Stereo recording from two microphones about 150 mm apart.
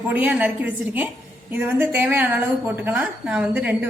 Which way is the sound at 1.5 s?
10° right (ahead or behind).